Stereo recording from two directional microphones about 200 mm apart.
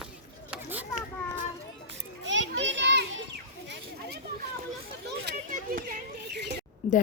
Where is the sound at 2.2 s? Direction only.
65° right (ahead or behind).